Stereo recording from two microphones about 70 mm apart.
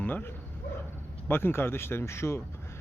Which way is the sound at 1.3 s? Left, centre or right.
Left.